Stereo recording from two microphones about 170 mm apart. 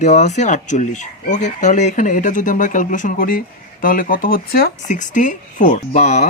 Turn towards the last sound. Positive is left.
turn(degrees=45)  # may be behind; listen again after turning